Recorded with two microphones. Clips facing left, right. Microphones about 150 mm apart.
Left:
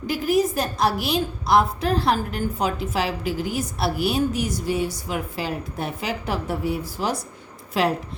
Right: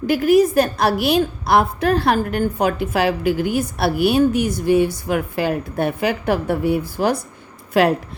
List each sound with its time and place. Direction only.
0.1 s a woman's voice: 65° right (ahead or behind)